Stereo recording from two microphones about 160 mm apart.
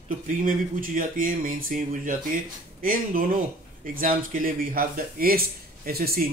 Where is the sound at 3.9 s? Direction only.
60° right (ahead or behind).